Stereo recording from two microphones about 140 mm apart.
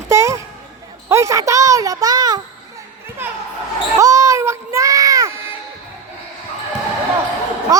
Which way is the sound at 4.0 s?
25° right (ahead or behind).